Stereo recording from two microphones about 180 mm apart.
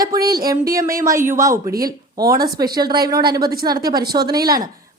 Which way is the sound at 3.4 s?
55° right (ahead or behind).